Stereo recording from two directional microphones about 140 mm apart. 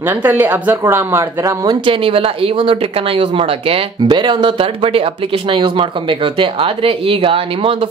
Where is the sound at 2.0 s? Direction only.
40° right (ahead or behind).